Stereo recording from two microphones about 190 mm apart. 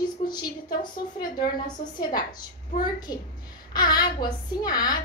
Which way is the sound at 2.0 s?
20° left (ahead or behind).